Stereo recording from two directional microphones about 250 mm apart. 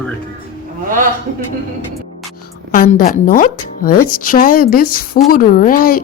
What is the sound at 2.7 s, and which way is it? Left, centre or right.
Speech, left.